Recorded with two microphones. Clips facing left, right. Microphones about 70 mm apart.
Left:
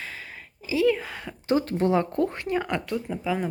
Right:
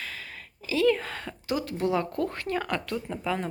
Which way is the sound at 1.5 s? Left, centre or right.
Left.